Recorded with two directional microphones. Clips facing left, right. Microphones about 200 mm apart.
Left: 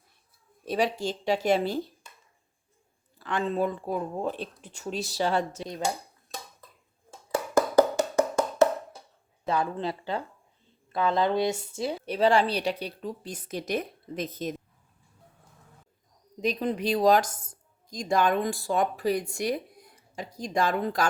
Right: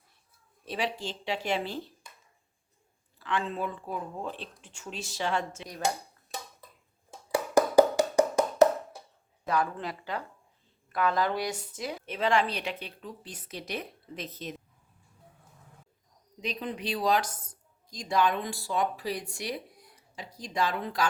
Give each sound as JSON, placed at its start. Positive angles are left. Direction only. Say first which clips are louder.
{"t": 0.6, "sound": "a woman's voice", "louder": "left 6 dB", "side_deg": 45}
{"t": 3.2, "sound": "a woman's voice", "louder": "left 5 dB", "side_deg": 40}
{"t": 7.3, "sound": "hands", "louder": "even", "side_deg": -15}
{"t": 9.5, "sound": "a woman's voice", "louder": "left 2 dB", "side_deg": 25}
{"t": 16.4, "sound": "speech", "louder": "left 7 dB", "side_deg": 40}